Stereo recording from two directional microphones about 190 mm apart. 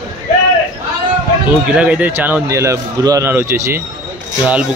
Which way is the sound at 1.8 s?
10° right (ahead or behind).